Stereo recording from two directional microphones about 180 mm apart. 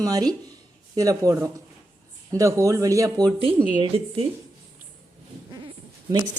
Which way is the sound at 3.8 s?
30° right (ahead or behind).